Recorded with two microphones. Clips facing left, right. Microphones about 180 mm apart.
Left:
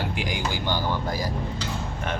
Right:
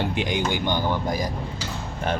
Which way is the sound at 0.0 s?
25° right (ahead or behind).